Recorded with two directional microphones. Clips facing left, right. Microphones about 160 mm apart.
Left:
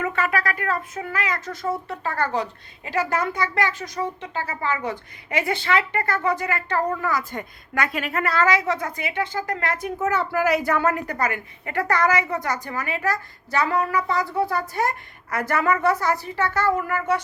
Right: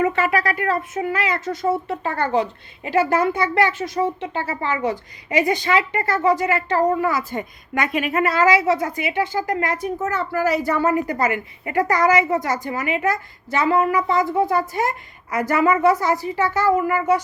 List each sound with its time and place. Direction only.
0.3 s a woman's voice: 30° right (ahead or behind); by 17.2 s 15° right (ahead or behind)